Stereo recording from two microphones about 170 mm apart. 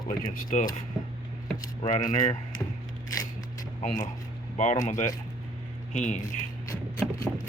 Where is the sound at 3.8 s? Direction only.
45° left (ahead or behind).